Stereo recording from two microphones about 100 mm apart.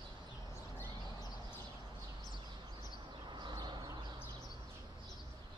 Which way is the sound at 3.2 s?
50° right (ahead or behind).